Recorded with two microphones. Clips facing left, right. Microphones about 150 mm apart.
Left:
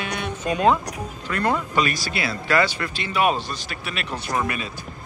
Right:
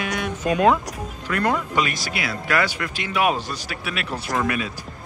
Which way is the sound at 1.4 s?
15° right (ahead or behind).